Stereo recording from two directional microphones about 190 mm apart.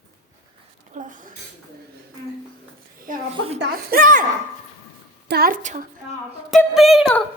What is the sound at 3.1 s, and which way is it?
A woman's voice, 45° right (ahead or behind).